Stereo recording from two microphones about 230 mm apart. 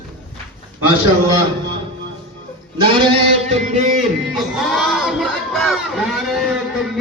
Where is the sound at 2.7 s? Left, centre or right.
Right.